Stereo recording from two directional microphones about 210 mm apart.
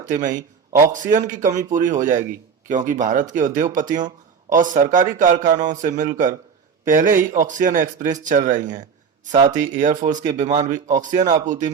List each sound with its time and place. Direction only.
0.0 s a man's voice: 35° right (ahead or behind)